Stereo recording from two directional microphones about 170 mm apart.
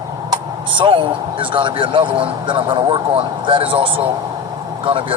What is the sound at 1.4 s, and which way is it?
A man's voice, 30° right (ahead or behind).